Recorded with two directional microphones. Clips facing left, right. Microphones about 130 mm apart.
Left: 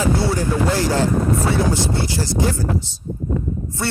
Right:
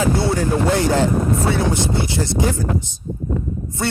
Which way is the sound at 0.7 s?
20° right (ahead or behind).